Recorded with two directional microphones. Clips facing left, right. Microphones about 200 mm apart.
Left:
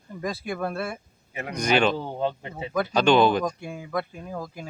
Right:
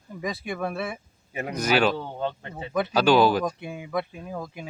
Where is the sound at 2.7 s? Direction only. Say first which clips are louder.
Even; 5° right (ahead or behind).